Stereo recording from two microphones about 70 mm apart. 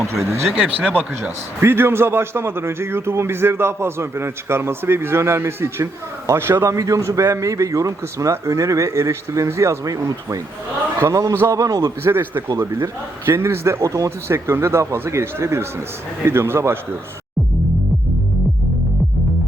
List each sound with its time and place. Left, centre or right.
0.5 s speech: centre
1.6 s a man's voice: right
11.6 s a man's voice: right
12.0 s a man's voice: right